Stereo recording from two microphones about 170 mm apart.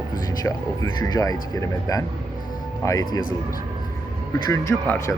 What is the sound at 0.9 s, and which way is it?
Speech, 20° left (ahead or behind).